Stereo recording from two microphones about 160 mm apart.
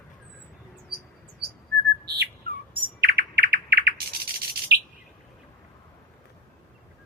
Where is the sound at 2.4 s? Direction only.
70° right (ahead or behind).